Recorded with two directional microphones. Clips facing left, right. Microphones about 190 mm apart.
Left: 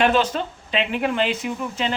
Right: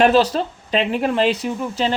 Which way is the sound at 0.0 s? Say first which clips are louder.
Right 5 dB; 35° right (ahead or behind).